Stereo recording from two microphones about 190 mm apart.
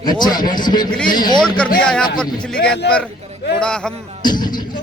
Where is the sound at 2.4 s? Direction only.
5° left (ahead or behind).